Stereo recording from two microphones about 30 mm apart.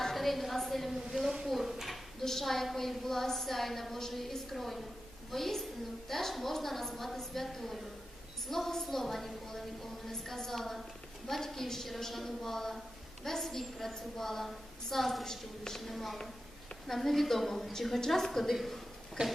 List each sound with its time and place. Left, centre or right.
0.0 s a woman's voice: centre
2.2 s a woman's voice: centre
15.8 s a woman's voice: centre